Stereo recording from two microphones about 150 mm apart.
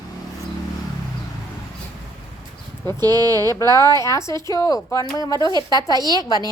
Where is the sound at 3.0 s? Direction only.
25° right (ahead or behind).